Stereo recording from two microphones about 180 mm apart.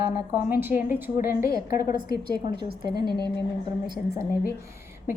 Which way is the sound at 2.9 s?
25° right (ahead or behind).